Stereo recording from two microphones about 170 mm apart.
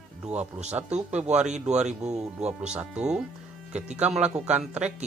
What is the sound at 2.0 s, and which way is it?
Speech, 40° right (ahead or behind).